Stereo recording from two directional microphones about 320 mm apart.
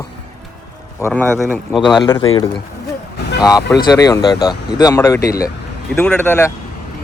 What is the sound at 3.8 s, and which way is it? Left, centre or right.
Speech, centre.